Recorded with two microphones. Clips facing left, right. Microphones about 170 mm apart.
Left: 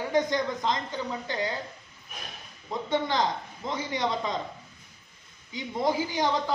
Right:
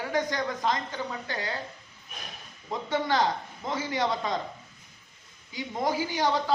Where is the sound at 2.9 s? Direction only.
20° left (ahead or behind).